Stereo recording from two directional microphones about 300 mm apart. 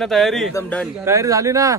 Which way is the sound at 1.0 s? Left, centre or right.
Centre.